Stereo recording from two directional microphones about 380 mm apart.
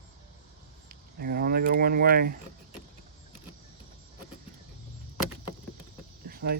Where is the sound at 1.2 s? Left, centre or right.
Right.